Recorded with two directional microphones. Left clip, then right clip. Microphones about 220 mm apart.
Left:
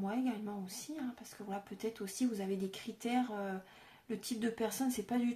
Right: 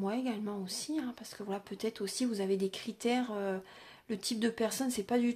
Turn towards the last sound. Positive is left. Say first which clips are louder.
# right 5 dB
turn(degrees=-35)  # may be behind; listen again after turning